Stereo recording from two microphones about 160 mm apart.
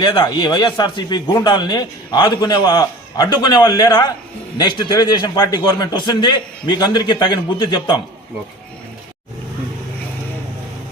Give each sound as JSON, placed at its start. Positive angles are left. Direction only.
{"t": 0.0, "sound": "a man's voice", "side_deg": 30}